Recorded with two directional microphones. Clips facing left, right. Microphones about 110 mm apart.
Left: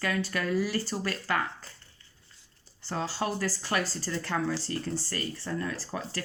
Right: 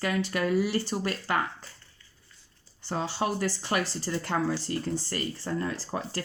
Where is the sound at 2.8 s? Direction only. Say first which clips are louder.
Right 2 dB; 15° right (ahead or behind).